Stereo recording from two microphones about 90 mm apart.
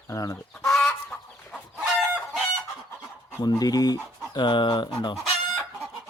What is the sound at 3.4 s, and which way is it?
Speech, 50° left (ahead or behind).